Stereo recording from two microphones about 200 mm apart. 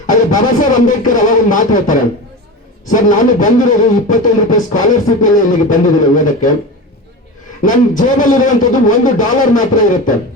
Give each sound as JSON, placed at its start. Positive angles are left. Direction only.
{"t": 0.1, "sound": "a man's voice", "side_deg": 40}
{"t": 7.6, "sound": "a man's voice", "side_deg": 40}